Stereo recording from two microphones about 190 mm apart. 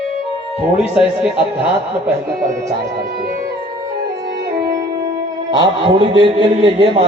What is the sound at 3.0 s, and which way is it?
Music, 50° right (ahead or behind).